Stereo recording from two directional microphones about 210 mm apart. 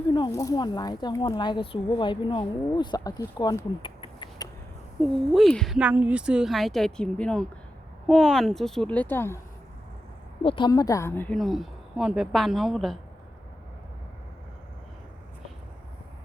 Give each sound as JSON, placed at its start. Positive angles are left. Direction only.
{"t": 0.1, "sound": "speech", "side_deg": 15}
{"t": 4.9, "sound": "a woman's voice", "side_deg": 0}
{"t": 10.4, "sound": "a woman's voice", "side_deg": 25}